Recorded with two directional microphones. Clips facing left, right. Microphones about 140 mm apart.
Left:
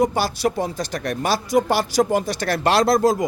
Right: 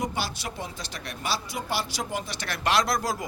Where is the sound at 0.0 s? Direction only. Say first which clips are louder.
Left 11 dB; 40° left (ahead or behind).